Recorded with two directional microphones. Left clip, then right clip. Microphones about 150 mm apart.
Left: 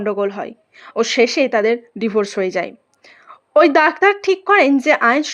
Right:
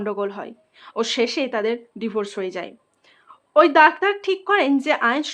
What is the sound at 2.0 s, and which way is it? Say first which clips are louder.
A woman's voice: left 7 dB; 30° left (ahead or behind).